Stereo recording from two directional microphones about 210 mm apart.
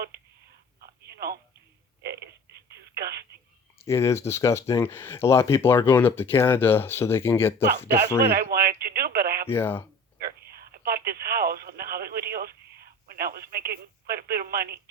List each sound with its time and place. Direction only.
0.8 s telephone: 50° right (ahead or behind)
3.8 s speech: 15° left (ahead or behind)
8.3 s speech: 45° right (ahead or behind)
9.5 s speech: 10° left (ahead or behind)
10.2 s telephone: 45° right (ahead or behind)